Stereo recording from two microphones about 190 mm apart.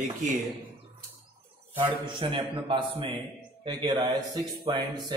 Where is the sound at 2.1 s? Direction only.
25° right (ahead or behind).